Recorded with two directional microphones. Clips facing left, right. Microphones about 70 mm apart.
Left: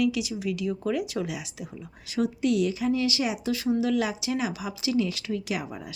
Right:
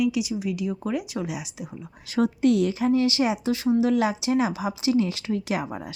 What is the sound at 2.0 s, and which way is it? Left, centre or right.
A woman's voice, right.